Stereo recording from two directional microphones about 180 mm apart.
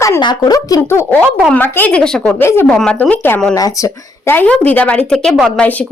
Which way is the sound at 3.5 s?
20° left (ahead or behind).